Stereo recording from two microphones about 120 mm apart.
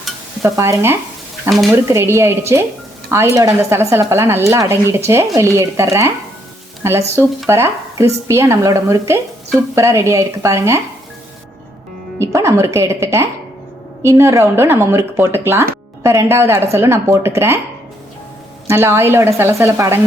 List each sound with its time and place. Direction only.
0.4 s a woman's voice: 25° right (ahead or behind)
12.2 s a woman's voice: 25° right (ahead or behind)
18.7 s a woman's voice: 20° right (ahead or behind)